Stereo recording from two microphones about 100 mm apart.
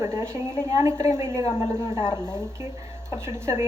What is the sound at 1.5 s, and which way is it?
Speech, 40° left (ahead or behind).